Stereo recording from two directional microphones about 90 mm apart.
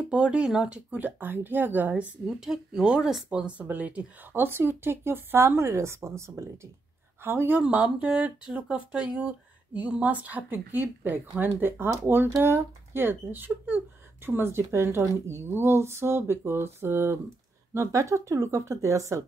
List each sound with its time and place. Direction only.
0.1 s speech: 10° right (ahead or behind)
2.2 s speech: 5° right (ahead or behind); by 19.2 s 35° right (ahead or behind)